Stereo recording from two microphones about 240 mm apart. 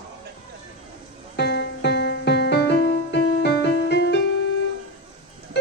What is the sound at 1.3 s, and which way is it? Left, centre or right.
Music, left.